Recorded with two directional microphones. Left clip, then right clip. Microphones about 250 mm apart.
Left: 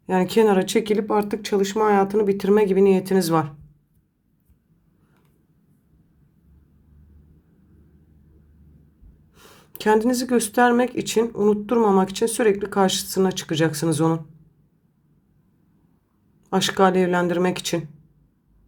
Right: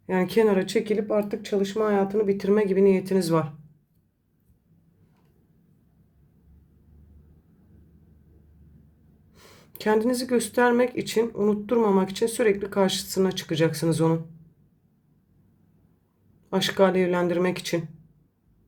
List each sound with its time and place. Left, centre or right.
0.0 s speech: centre
9.3 s speech: centre
16.5 s speech: centre